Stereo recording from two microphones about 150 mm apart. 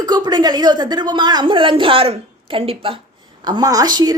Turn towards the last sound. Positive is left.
turn(degrees=-25)  # may be behind; listen again after turning